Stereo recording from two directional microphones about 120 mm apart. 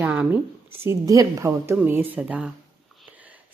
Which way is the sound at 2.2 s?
5° right (ahead or behind).